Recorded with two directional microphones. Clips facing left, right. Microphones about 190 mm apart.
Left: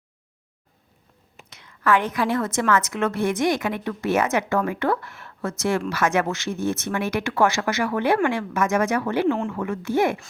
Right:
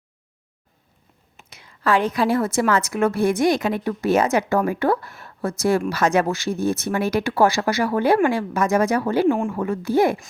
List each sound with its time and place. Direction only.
2.1 s speech: 30° right (ahead or behind)
9.2 s speech: 15° right (ahead or behind)
9.5 s speech: 35° right (ahead or behind)